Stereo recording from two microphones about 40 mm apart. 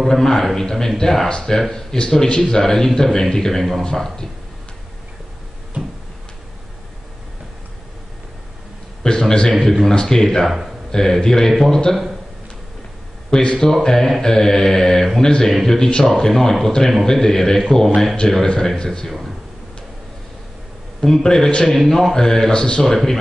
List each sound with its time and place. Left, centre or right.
0.0 s a man's voice: centre
2.6 s speech: centre
9.0 s a man's voice: centre
11.5 s a man's voice: centre
13.3 s a man's voice: centre
21.0 s speech: centre
21.6 s speech: centre